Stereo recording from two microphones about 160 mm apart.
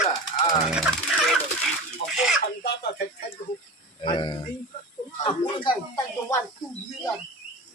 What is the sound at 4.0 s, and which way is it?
Speech, 30° left (ahead or behind).